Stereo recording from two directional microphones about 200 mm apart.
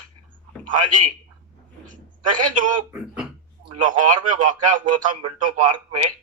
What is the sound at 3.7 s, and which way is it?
Speech, 40° right (ahead or behind).